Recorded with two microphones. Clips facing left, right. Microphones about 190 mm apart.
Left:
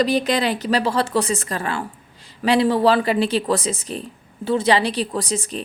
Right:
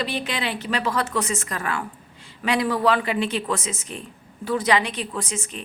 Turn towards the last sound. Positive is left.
turn(degrees=35)  # may be behind; listen again after turning